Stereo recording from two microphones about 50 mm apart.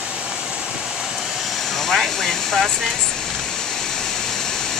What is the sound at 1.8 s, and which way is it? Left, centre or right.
Speech, centre.